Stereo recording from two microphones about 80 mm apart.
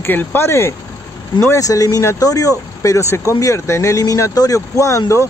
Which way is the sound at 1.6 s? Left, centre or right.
Left.